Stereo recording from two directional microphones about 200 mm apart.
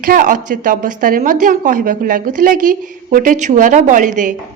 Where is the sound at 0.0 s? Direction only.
45° right (ahead or behind).